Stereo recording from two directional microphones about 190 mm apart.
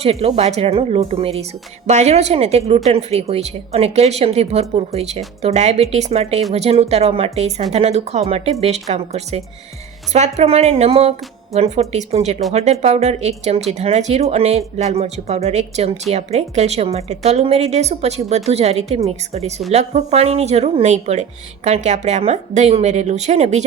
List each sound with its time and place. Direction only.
0.0 s a woman's voice: 30° right (ahead or behind)